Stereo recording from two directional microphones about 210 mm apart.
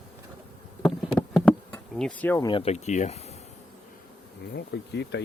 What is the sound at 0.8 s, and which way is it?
Insect, 5° left (ahead or behind).